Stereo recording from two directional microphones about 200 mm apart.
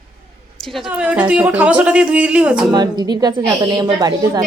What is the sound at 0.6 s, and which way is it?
A woman's voice, centre (ahead or behind).